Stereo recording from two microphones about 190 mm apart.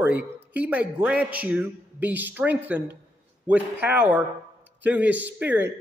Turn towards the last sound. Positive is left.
turn(degrees=-10)  # may be behind; listen again after turning